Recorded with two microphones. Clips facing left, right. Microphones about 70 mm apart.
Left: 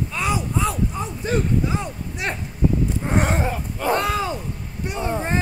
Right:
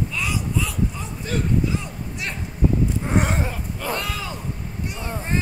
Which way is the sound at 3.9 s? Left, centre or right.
Left.